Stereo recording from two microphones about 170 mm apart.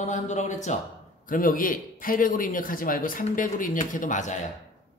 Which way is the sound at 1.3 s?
55° left (ahead or behind).